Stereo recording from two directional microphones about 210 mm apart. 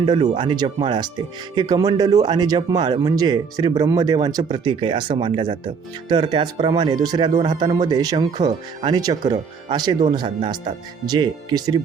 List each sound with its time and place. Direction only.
0.0 s speech: 25° right (ahead or behind)